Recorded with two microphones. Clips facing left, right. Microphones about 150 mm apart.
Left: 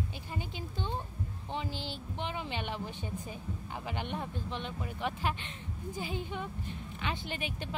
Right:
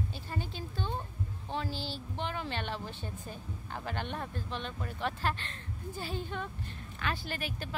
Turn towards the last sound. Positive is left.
turn(degrees=20)  # may be behind; listen again after turning